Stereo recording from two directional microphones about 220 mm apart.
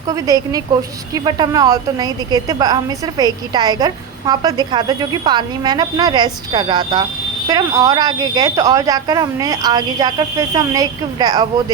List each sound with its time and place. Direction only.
0.1 s a woman's voice: 15° right (ahead or behind)